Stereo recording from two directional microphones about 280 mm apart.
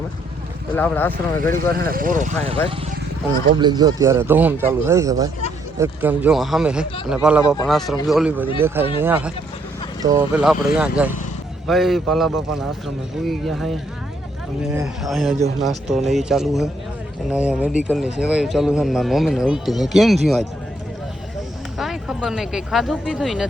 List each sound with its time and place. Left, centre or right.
0.8 s speech: centre
1.7 s speech: right; by 20.5 s centre
21.8 s speech: centre